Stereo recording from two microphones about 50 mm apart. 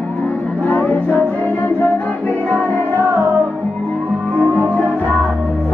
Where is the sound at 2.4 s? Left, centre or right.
Right.